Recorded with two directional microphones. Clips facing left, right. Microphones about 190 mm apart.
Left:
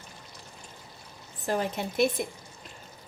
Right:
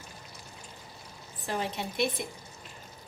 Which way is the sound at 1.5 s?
45° left (ahead or behind).